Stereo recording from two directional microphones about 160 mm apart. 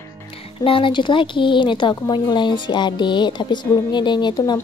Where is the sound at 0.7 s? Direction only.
30° left (ahead or behind).